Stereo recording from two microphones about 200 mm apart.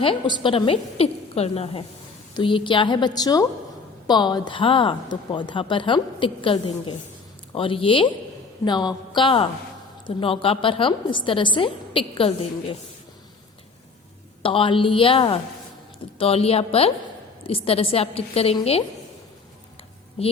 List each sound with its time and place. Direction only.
0.0 s a woman's voice: 25° left (ahead or behind)
14.4 s a woman's voice: 25° left (ahead or behind)
20.2 s a woman's voice: 30° left (ahead or behind)